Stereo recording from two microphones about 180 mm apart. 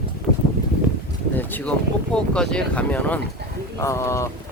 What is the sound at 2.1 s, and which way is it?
Speech, 5° left (ahead or behind).